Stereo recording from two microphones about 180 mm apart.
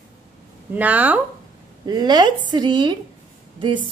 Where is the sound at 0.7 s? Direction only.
10° right (ahead or behind).